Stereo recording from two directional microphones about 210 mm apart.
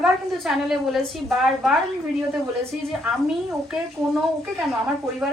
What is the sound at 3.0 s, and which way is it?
A woman's voice, 5° right (ahead or behind).